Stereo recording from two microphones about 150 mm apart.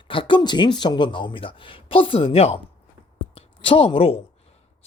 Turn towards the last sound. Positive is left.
turn(degrees=35)  # may be behind; listen again after turning